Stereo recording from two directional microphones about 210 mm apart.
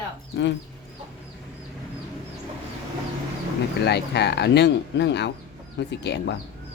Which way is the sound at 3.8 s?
50° left (ahead or behind).